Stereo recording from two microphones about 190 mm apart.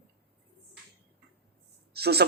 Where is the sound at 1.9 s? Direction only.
55° right (ahead or behind).